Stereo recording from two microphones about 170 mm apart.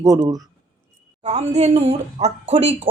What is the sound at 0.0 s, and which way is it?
Speech, 20° right (ahead or behind).